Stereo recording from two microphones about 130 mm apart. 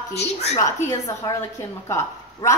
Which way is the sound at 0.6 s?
25° left (ahead or behind).